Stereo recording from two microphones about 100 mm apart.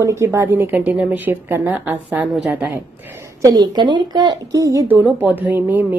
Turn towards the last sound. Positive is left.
turn(degrees=-20)  # may be behind; listen again after turning